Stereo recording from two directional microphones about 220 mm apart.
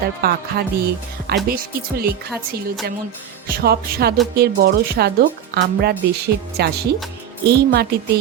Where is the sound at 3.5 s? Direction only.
40° right (ahead or behind).